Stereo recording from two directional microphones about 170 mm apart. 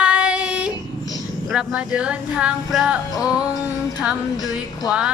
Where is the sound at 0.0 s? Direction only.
10° right (ahead or behind).